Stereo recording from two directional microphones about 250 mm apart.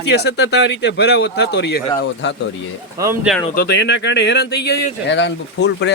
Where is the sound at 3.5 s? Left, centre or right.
Left.